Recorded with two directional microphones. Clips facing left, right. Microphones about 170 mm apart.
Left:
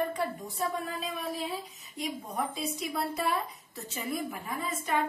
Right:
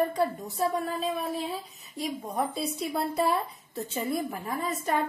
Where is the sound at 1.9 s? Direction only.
35° right (ahead or behind).